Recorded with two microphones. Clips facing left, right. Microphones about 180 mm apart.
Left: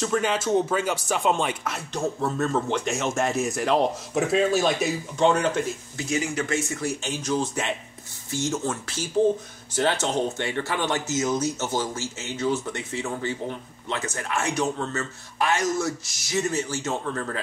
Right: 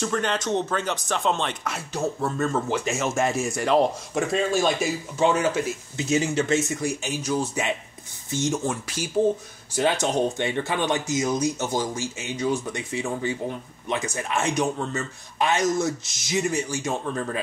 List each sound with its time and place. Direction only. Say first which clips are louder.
0.0 s speech: left 1 dB; 5° left (ahead or behind)
5.9 s speech: right 4 dB; 25° right (ahead or behind)
6.8 s speech: right 1 dB; 10° right (ahead or behind)